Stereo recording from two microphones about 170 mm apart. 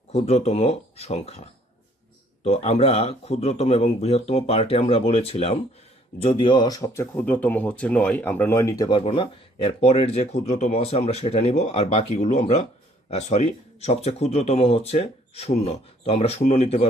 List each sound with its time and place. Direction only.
0.1 s speech: 40° left (ahead or behind)